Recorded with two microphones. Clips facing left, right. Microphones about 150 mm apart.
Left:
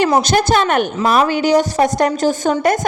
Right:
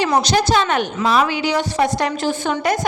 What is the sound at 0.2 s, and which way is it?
A woman's voice, 50° left (ahead or behind).